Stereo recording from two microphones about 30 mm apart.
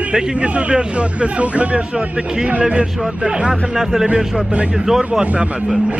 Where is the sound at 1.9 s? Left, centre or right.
Right.